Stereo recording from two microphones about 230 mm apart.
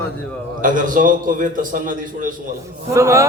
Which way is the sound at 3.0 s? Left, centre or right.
Centre.